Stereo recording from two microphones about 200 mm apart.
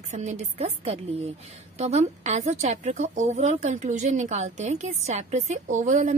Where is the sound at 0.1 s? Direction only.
35° right (ahead or behind).